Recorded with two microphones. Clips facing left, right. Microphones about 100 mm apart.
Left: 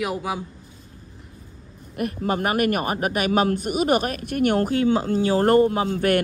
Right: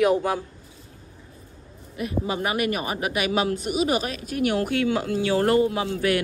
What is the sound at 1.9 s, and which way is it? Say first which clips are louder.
A man's voice: left 2 dB; 50° left (ahead or behind).